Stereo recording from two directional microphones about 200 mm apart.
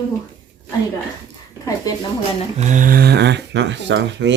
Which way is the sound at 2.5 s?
40° right (ahead or behind).